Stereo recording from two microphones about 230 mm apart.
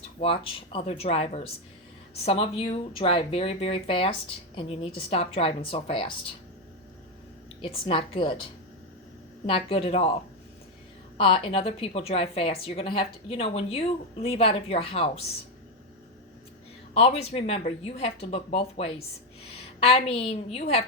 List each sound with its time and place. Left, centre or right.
0.2 s speech: left
7.6 s speech: left
9.5 s speech: left
11.2 s speech: left
16.9 s speech: left